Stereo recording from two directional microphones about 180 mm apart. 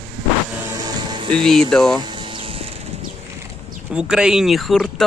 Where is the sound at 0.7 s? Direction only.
25° right (ahead or behind).